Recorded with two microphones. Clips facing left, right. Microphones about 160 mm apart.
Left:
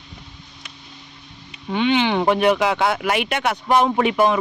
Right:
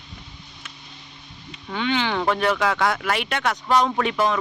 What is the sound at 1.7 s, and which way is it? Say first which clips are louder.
Speech: left 5 dB; 20° left (ahead or behind).